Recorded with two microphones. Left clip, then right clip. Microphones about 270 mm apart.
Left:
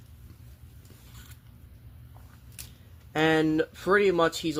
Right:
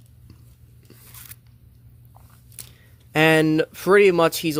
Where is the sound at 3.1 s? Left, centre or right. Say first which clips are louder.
Right 7 dB; right.